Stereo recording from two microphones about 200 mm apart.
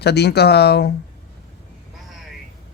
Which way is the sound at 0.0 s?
55° left (ahead or behind).